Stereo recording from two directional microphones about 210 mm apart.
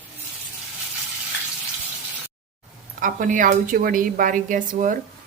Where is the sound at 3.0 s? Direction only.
40° right (ahead or behind).